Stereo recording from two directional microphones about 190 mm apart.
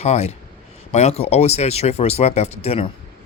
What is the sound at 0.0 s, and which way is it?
Speech, 35° left (ahead or behind).